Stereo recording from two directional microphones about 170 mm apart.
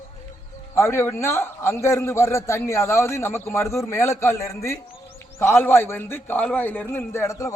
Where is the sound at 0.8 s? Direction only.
15° left (ahead or behind).